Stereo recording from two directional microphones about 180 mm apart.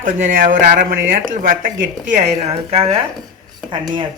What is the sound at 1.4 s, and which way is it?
Speech, 50° right (ahead or behind).